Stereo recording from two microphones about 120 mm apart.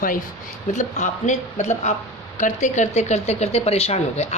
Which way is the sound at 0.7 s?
90° left.